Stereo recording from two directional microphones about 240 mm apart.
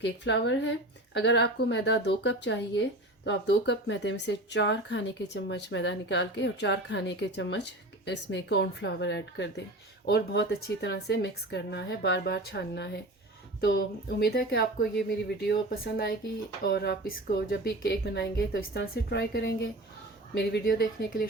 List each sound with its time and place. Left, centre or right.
0.0 s speech: left